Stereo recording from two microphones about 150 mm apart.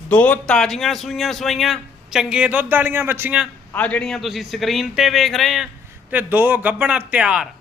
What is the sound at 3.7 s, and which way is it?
Speech, 10° left (ahead or behind).